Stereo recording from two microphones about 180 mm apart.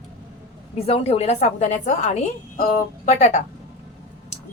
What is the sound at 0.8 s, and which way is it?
A woman's voice, 35° left (ahead or behind).